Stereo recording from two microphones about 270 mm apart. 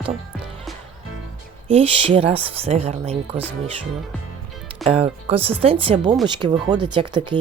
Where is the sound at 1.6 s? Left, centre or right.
Right.